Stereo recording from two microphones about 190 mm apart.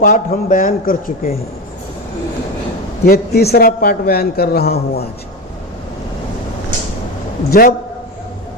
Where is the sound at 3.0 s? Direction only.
55° left (ahead or behind).